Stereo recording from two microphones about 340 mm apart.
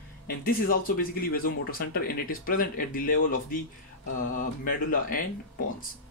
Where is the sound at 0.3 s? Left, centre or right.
Left.